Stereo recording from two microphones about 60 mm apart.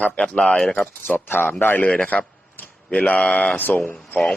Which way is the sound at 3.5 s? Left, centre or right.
Left.